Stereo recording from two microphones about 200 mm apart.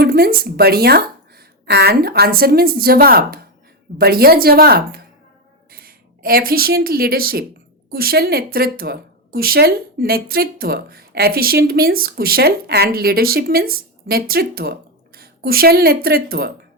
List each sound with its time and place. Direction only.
0.0 s a woman's voice: 50° right (ahead or behind)